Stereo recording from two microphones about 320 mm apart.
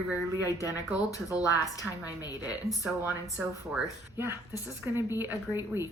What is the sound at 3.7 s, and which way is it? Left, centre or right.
Speech, centre.